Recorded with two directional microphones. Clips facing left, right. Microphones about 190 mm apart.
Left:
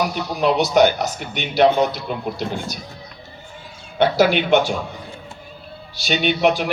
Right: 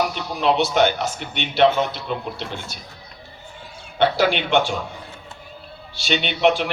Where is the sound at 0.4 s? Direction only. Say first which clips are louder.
Left 3 dB; 45° left (ahead or behind).